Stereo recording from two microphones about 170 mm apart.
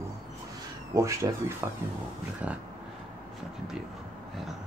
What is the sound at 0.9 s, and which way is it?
Speech, 20° right (ahead or behind).